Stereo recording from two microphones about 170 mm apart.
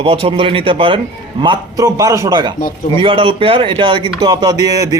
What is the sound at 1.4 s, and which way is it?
Speech, 20° right (ahead or behind).